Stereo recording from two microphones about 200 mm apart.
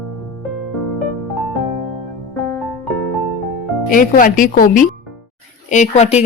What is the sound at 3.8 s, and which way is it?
A woman's voice, 45° left (ahead or behind).